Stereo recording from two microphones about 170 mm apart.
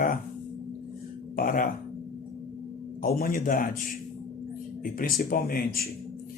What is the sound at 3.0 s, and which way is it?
Speech, 55° left (ahead or behind).